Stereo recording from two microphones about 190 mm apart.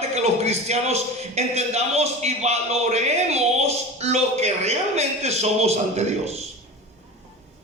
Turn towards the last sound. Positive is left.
turn(degrees=-35)  # may be behind; listen again after turning